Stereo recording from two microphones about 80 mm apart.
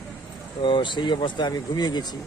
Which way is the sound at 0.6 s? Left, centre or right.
Left.